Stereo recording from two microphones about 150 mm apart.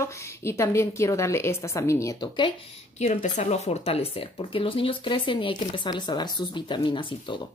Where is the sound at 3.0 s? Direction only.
50° left (ahead or behind).